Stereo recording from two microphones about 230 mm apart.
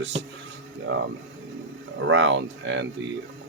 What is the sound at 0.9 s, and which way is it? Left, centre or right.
Speech, right.